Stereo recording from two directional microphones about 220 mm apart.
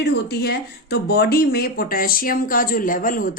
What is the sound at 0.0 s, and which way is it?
Speech, 45° left (ahead or behind).